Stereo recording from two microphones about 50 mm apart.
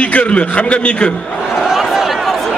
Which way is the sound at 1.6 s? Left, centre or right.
Centre.